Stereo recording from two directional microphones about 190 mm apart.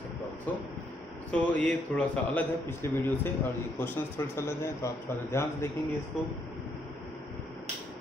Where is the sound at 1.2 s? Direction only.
5° left (ahead or behind).